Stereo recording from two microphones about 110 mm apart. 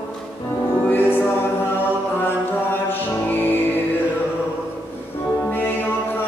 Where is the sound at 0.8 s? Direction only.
20° left (ahead or behind).